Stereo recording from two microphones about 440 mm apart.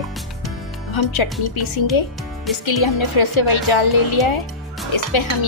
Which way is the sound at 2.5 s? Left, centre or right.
Left.